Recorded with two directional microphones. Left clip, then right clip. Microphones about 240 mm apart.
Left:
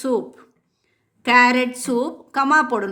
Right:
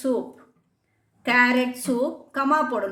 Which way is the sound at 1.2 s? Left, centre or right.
Left.